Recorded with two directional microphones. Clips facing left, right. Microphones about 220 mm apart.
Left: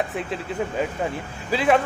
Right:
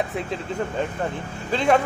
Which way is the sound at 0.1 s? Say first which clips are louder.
Even; 5° left (ahead or behind).